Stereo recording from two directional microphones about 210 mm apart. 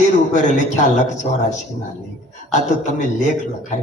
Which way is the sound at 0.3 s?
35° left (ahead or behind).